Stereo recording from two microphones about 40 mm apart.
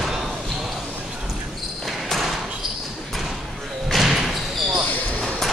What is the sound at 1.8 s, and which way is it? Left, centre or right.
Basketball bounce, centre.